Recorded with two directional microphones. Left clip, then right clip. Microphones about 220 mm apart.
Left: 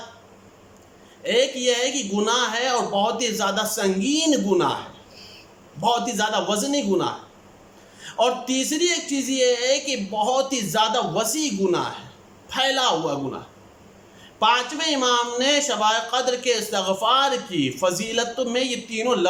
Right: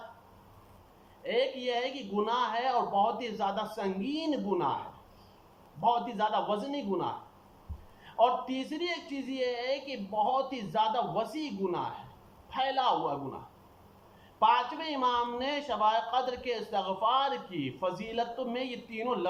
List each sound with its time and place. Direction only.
1.2 s a man's voice: 45° left (ahead or behind)
5.8 s a man's voice: 40° left (ahead or behind)
14.3 s a man's voice: 45° left (ahead or behind)